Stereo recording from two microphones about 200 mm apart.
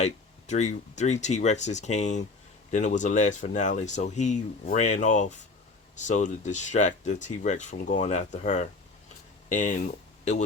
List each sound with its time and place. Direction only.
0.0 s speech: 35° left (ahead or behind)